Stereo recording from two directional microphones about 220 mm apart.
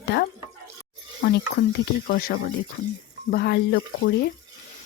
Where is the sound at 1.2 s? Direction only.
45° left (ahead or behind).